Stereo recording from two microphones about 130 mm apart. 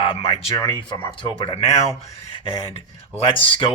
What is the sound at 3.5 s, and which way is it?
Speech, 40° left (ahead or behind).